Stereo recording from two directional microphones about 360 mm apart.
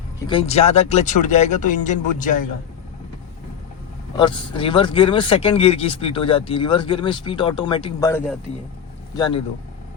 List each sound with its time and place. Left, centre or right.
0.3 s speech: centre
4.2 s speech: centre